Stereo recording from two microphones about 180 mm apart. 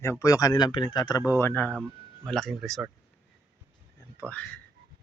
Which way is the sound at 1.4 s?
10° left (ahead or behind).